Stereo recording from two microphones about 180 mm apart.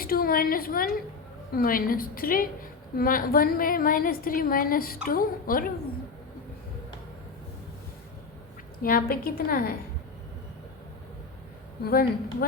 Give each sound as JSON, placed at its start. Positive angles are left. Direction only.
{"t": 0.0, "sound": "a woman's voice", "side_deg": 55}
{"t": 8.8, "sound": "a woman's voice", "side_deg": 55}
{"t": 11.9, "sound": "a woman's voice", "side_deg": 55}